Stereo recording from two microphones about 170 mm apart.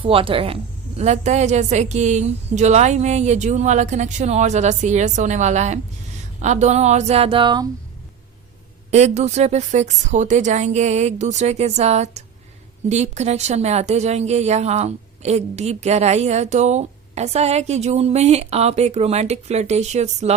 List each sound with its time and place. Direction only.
0.0 s a woman's voice: 30° right (ahead or behind)
8.9 s a woman's voice: 40° right (ahead or behind)